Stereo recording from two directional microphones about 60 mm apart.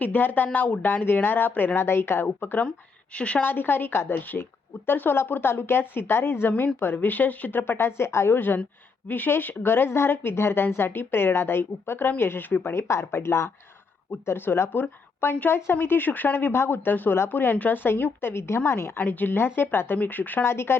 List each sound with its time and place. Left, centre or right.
0.0 s speech: left
2.2 s speech: left
2.6 s speech: centre
3.4 s speech: left
8.4 s speech: left
12.7 s speech: left
18.9 s speech: left